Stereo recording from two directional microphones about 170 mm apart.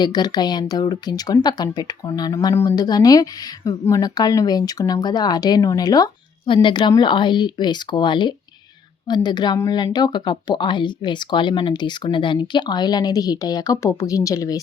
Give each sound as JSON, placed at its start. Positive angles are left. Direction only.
{"t": 0.0, "sound": "speech", "side_deg": 25}